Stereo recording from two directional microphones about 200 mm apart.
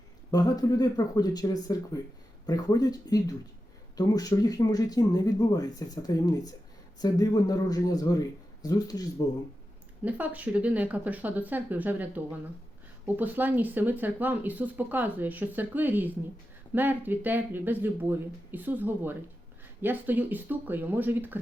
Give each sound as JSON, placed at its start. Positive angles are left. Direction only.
{"t": 0.3, "sound": "speech", "side_deg": 20}
{"t": 10.0, "sound": "speech", "side_deg": -10}